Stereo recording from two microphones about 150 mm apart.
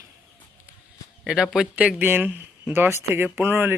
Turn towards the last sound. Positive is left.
turn(degrees=-15)  # may be behind; listen again after turning